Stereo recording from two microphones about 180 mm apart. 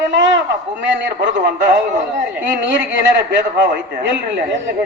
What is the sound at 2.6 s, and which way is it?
Speech, 85° right.